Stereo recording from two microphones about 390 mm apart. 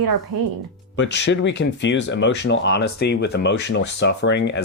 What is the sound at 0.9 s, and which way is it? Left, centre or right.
Speech, left.